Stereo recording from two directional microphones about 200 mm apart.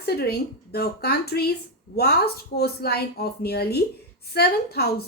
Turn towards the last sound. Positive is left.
turn(degrees=50)  # may be behind; listen again after turning